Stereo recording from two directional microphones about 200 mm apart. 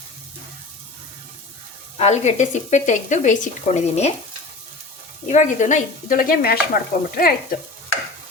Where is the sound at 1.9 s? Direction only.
35° left (ahead or behind).